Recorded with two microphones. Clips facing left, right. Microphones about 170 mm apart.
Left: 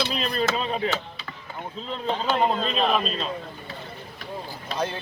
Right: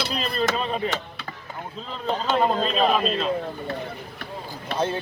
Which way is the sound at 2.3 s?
Centre (ahead or behind).